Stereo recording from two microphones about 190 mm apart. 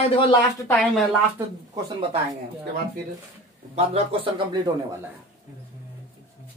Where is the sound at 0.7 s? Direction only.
Centre (ahead or behind).